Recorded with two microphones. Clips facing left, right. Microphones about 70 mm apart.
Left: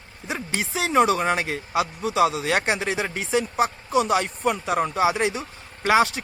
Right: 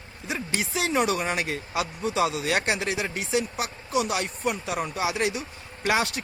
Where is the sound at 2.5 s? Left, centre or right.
Left.